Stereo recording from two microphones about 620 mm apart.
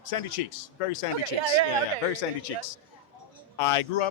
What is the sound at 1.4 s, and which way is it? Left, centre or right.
Speech, right.